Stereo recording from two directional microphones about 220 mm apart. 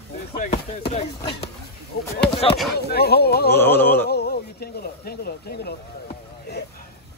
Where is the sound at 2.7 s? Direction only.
45° left (ahead or behind).